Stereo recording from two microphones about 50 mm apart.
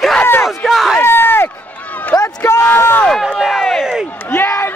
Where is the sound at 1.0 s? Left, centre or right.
Left.